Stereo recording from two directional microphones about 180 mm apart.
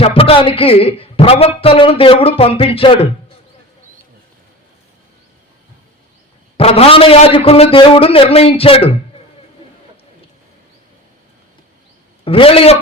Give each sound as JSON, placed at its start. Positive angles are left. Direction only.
{"t": 0.0, "sound": "a man's voice", "side_deg": 30}
{"t": 6.6, "sound": "a man's voice", "side_deg": 35}
{"t": 12.2, "sound": "a man's voice", "side_deg": 30}